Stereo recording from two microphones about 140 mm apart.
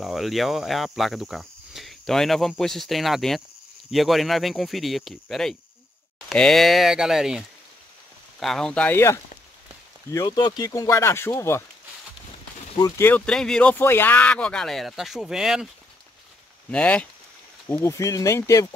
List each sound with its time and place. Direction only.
0.0 s speech: centre (ahead or behind); by 9.2 s 20° left (ahead or behind)
10.1 s speech: 30° left (ahead or behind)
12.7 s speech: 25° left (ahead or behind)
13.0 s speech: 10° left (ahead or behind)
16.7 s speech: 10° left (ahead or behind)